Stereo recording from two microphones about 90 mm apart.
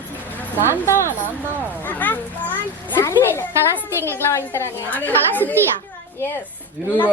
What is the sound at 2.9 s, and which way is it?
A woman's voice, 25° left (ahead or behind).